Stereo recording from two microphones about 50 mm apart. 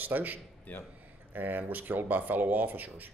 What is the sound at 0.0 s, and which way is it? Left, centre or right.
Speech, right.